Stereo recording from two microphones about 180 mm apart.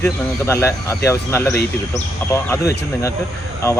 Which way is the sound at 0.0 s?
15° left (ahead or behind).